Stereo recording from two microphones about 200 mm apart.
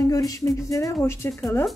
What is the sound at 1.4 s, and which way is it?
Speech, centre (ahead or behind).